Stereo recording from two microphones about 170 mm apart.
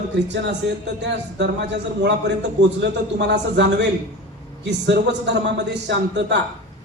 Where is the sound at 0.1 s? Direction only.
90° right.